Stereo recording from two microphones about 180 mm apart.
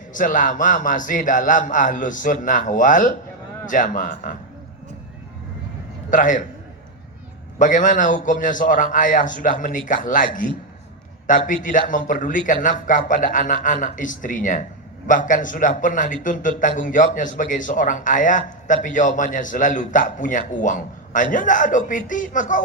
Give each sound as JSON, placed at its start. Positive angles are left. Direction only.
{"t": 0.1, "sound": "a man's voice", "side_deg": 45}
{"t": 6.1, "sound": "a man's voice", "side_deg": 45}
{"t": 7.6, "sound": "a man's voice", "side_deg": 45}